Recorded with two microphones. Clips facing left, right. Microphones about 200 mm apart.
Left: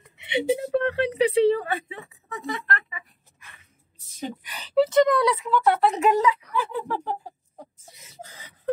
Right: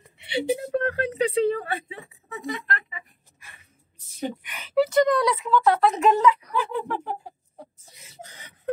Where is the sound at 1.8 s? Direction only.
25° right (ahead or behind).